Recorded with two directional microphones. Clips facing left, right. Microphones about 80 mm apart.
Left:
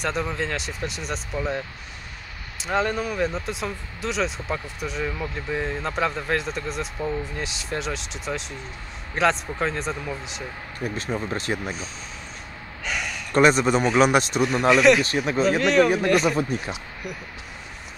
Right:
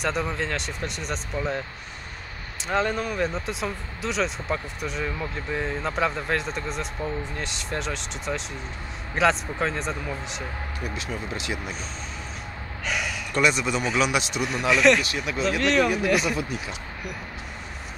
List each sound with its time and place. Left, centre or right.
0.0 s speech: centre
2.6 s speech: centre
11.0 s speech: left
12.8 s gasp: centre
13.3 s a man's voice: left
14.7 s speech: centre
15.0 s speech: left
15.6 s speech: centre
16.3 s speech: left